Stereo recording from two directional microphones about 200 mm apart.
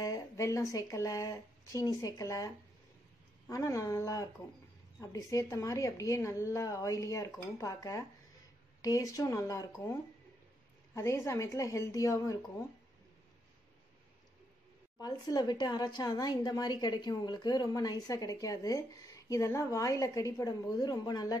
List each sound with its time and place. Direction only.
0.0 s a woman's voice: 15° left (ahead or behind)
11.0 s a woman's voice: 15° left (ahead or behind)
15.0 s a woman's voice: 20° left (ahead or behind)